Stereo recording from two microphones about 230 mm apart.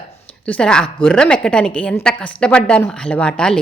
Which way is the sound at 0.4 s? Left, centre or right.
Centre.